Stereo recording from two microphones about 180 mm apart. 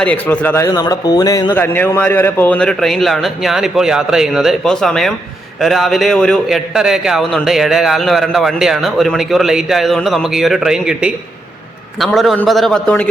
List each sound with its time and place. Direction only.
0.0 s a man's voice: 10° left (ahead or behind)